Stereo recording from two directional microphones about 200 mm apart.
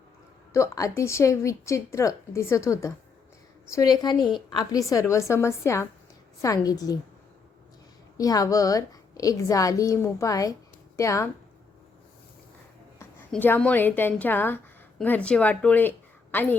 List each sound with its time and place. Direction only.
0.5 s a woman's voice: 15° left (ahead or behind)
8.2 s a woman's voice: 20° left (ahead or behind)
13.0 s a woman's voice: 10° left (ahead or behind)